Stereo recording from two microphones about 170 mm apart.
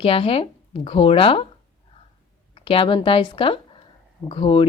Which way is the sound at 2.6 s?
30° left (ahead or behind).